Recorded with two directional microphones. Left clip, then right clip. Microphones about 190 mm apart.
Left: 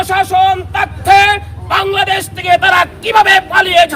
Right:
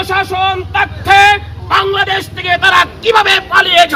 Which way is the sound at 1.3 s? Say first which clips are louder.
Right 2 dB; 45° left (ahead or behind).